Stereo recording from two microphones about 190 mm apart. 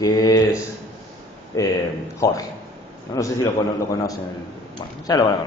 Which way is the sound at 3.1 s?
15° left (ahead or behind).